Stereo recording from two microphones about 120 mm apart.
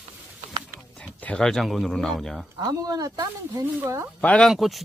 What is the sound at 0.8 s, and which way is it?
Speech, 5° left (ahead or behind).